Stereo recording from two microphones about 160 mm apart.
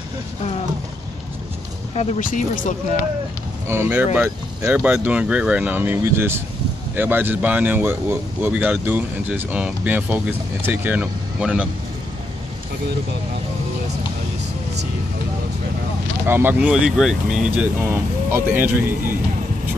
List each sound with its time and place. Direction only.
2.0 s speech: 50° left (ahead or behind)
3.6 s speech: 15° right (ahead or behind)
16.3 s speech: 15° right (ahead or behind)
18.3 s speech: 15° right (ahead or behind)